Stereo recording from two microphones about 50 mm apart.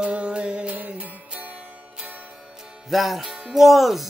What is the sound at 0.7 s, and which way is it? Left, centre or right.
Music, right.